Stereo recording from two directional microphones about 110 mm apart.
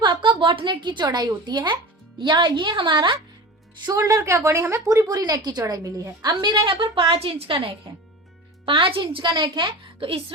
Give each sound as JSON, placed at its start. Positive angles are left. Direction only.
{"t": 0.0, "sound": "a woman's voice", "side_deg": -45}
{"t": 3.9, "sound": "a woman's voice", "side_deg": -30}
{"t": 6.4, "sound": "a woman's voice", "side_deg": -45}